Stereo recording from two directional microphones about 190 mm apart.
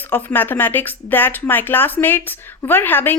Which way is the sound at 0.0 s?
10° left (ahead or behind).